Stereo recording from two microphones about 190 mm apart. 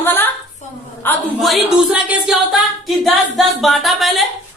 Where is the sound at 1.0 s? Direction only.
Centre (ahead or behind).